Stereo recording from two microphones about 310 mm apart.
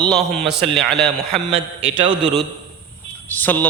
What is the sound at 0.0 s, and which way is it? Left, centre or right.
A man's voice, centre.